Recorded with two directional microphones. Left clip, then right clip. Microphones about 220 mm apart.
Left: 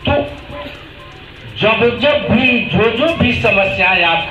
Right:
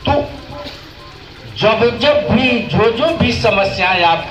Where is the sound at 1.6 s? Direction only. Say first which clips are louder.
Even; 30° left (ahead or behind).